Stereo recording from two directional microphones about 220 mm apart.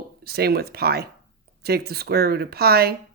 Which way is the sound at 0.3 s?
45° right (ahead or behind).